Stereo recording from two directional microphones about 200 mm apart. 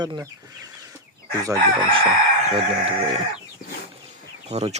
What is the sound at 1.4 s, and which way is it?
Speech, 20° right (ahead or behind).